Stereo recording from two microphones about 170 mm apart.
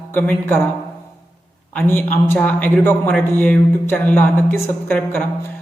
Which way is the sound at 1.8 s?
10° left (ahead or behind).